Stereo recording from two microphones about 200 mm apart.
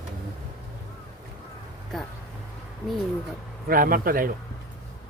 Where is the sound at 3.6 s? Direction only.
45° right (ahead or behind).